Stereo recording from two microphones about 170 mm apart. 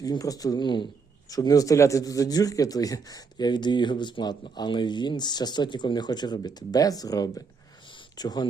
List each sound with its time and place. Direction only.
0.0 s speech: 20° left (ahead or behind)